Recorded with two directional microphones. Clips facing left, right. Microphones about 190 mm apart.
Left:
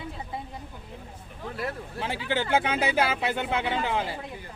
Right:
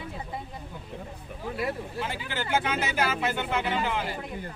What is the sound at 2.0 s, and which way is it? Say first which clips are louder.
Speech: left 4 dB; 30° left (ahead or behind).